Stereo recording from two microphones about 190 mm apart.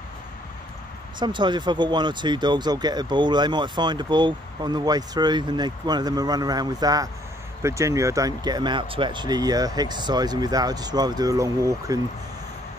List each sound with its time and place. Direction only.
1.2 s speech: 25° right (ahead or behind)